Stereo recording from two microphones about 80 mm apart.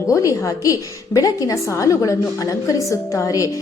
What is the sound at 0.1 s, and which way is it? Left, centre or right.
A woman's voice, left.